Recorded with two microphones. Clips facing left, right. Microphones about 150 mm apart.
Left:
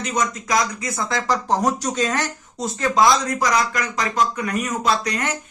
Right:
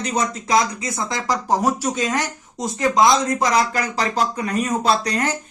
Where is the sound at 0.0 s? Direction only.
35° right (ahead or behind).